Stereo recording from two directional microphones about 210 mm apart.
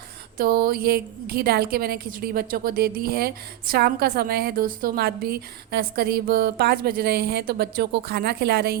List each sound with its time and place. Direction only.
0.3 s a woman's voice: 45° right (ahead or behind)